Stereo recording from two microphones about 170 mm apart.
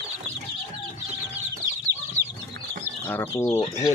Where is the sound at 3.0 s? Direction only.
10° left (ahead or behind).